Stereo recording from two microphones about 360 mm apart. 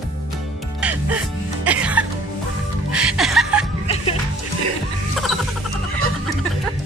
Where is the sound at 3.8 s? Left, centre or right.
Centre.